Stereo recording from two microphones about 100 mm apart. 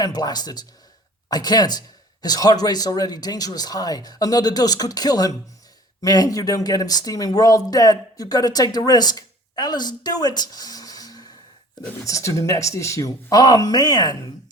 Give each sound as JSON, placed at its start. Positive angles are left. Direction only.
{"t": 0.0, "sound": "speech", "side_deg": 40}